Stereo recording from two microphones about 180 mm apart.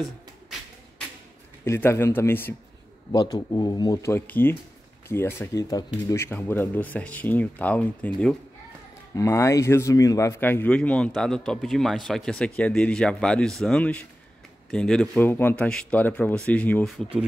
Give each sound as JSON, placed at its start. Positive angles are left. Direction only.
{"t": 0.0, "sound": "beatboxing", "side_deg": 0}
{"t": 1.6, "sound": "speech", "side_deg": 15}